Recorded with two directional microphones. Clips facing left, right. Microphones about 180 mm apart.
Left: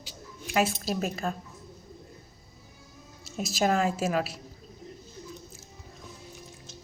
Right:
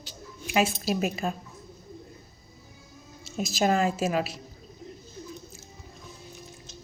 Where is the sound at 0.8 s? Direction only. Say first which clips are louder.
Right 3 dB; 10° right (ahead or behind).